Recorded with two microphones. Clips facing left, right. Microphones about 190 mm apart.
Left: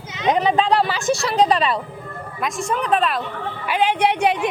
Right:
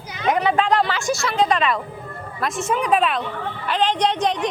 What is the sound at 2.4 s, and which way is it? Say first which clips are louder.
Speech: right 1 dB; centre (ahead or behind).